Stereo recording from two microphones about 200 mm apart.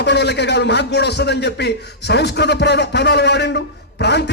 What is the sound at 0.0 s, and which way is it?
A man's voice, 55° left (ahead or behind).